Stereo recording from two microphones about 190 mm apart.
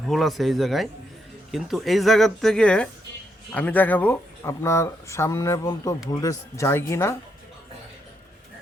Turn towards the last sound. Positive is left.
turn(degrees=10)  # may be behind; listen again after turning